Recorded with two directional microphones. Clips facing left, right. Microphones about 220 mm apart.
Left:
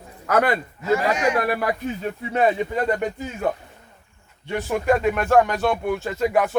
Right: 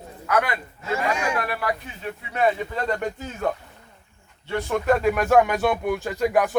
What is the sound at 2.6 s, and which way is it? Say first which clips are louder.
Speech: left 4 dB; 15° left (ahead or behind).